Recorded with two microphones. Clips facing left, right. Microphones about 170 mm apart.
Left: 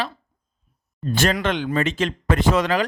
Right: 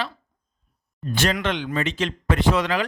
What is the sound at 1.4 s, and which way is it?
A man's voice, 45° left (ahead or behind).